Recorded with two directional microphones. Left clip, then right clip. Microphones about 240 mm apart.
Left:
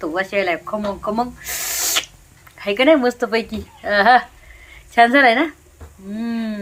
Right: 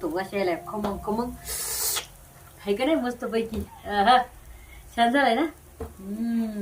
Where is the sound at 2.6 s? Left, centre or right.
Left.